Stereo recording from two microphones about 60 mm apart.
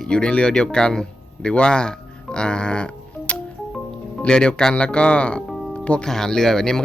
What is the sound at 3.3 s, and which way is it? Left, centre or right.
Music, left.